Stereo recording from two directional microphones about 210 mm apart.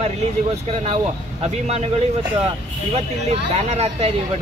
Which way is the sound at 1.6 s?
30° right (ahead or behind).